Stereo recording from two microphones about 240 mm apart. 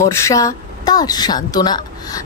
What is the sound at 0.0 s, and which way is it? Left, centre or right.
A woman's voice, centre.